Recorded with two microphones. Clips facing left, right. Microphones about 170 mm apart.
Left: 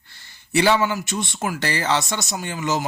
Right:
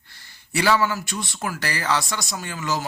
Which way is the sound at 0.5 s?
25° left (ahead or behind).